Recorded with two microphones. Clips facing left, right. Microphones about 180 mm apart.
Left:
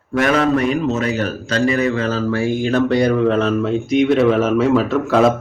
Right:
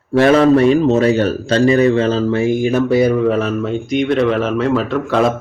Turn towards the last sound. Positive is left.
turn(degrees=5)  # may be behind; listen again after turning